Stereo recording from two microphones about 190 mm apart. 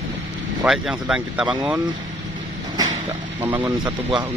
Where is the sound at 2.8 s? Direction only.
20° right (ahead or behind).